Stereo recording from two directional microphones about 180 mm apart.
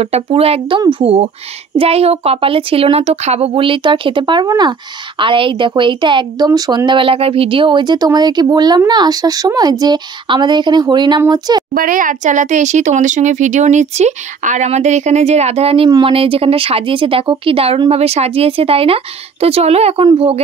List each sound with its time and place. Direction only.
0.0 s a woman's voice: 35° right (ahead or behind)
11.7 s speech: 50° right (ahead or behind); by 20.4 s 30° right (ahead or behind)